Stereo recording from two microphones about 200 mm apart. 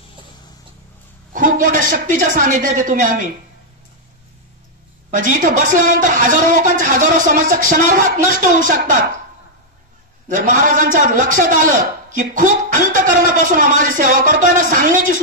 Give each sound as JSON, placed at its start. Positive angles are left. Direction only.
{"t": 1.3, "sound": "a man's voice", "side_deg": -40}
{"t": 5.1, "sound": "a man's voice", "side_deg": -40}
{"t": 10.2, "sound": "a man's voice", "side_deg": -40}